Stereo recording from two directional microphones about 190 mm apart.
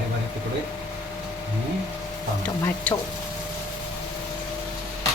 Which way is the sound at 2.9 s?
5° left (ahead or behind).